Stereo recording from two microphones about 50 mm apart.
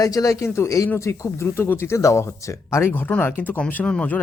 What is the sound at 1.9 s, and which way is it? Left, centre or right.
Speech, left.